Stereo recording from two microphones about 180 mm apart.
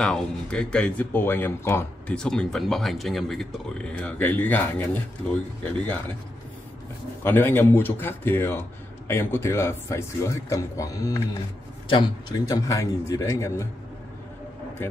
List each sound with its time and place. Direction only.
0.0 s speech: 5° left (ahead or behind)
7.2 s a man's voice: 10° left (ahead or behind)